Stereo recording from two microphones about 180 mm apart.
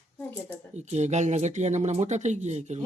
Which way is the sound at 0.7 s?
40° right (ahead or behind).